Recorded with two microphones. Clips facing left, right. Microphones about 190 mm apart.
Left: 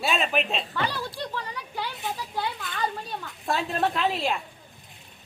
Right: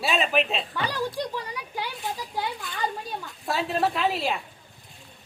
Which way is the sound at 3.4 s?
Centre (ahead or behind).